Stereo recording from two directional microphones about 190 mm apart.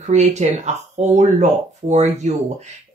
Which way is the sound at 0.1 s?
35° right (ahead or behind).